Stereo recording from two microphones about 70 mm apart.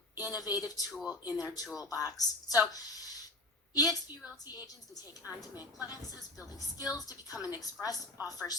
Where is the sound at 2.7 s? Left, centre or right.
Left.